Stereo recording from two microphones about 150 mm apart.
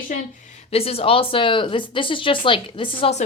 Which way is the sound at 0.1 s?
55° left (ahead or behind).